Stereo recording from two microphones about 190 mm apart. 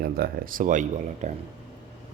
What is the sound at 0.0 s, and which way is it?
Speech, 50° right (ahead or behind).